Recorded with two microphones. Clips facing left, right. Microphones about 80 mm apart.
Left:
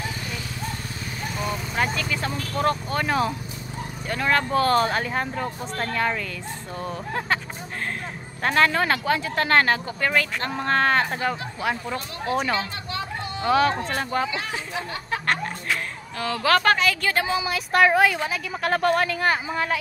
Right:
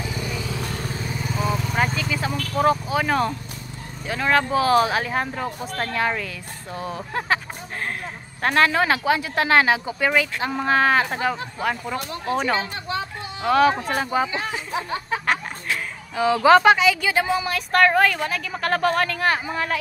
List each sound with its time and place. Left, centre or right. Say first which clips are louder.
1.3 s vehicle: right 4 dB; centre
2.5 s a woman's voice: right 4 dB; centre
8.4 s a woman's voice: right 2 dB; centre
14.3 s speech: right 3 dB; right
16.2 s a woman's voice: right 7 dB; centre